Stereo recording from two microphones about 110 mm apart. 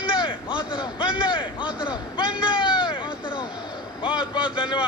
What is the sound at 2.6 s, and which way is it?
Vehicle, 45° left (ahead or behind).